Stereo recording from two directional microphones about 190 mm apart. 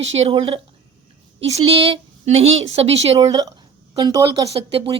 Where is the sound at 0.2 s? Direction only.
30° right (ahead or behind).